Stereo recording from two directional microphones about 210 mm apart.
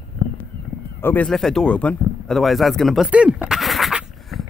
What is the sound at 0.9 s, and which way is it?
Speech, 10° left (ahead or behind).